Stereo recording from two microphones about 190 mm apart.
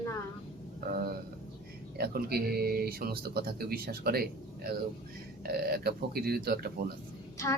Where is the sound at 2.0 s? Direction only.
55° right (ahead or behind).